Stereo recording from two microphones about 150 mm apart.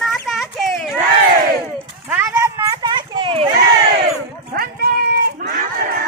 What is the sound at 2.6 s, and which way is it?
Clip-clop, 30° right (ahead or behind).